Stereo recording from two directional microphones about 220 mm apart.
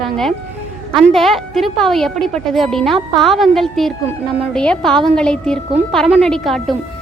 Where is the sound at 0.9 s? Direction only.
Centre (ahead or behind).